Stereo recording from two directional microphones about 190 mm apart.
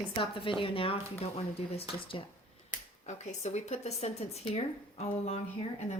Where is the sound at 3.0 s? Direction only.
40° left (ahead or behind).